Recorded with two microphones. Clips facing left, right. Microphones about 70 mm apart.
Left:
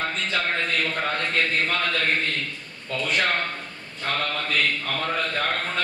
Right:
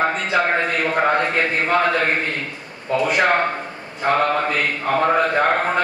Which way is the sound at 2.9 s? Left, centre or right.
Centre.